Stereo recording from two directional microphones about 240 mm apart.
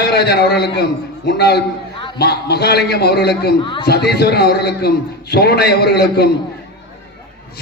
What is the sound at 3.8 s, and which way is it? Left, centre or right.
A man's voice, left.